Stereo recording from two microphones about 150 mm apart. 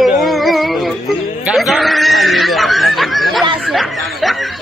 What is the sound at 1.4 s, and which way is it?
Snicker, 5° right (ahead or behind).